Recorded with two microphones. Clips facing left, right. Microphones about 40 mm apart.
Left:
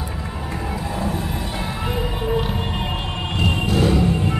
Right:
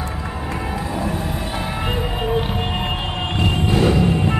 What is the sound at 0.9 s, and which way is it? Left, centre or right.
Music, centre.